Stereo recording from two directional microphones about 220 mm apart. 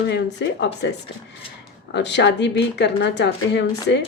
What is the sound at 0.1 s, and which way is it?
Speech, 50° left (ahead or behind).